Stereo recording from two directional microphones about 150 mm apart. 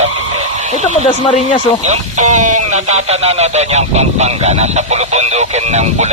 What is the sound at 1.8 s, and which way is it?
Speech, 50° right (ahead or behind).